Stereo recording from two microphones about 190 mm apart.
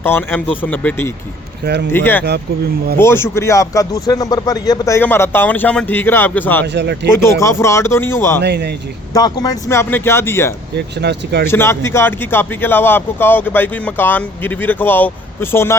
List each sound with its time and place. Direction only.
0.0 s speech: 10° left (ahead or behind)
1.6 s speech: 65° right (ahead or behind)
1.9 s speech: 10° left (ahead or behind)
6.7 s speech: 65° right (ahead or behind)
7.2 s speech: 15° left (ahead or behind)
8.4 s speech: 60° right (ahead or behind)
9.1 s speech: 20° left (ahead or behind)
10.8 s speech: 60° right (ahead or behind)
11.4 s speech: 15° left (ahead or behind)